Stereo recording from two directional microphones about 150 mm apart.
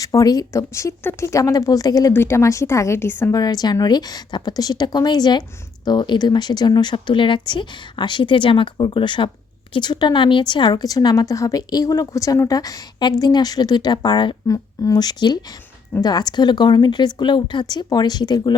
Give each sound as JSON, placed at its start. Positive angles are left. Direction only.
{"t": 0.0, "sound": "a woman's voice", "side_deg": 25}
{"t": 3.4, "sound": "a woman's voice", "side_deg": 25}